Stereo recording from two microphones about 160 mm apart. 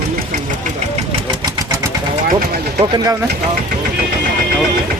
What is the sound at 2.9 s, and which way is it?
Speech, 25° right (ahead or behind).